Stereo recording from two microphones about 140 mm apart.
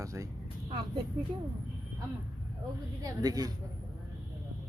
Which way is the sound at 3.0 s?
25° right (ahead or behind).